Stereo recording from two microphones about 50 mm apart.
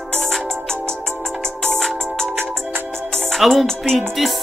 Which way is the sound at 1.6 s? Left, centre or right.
Centre.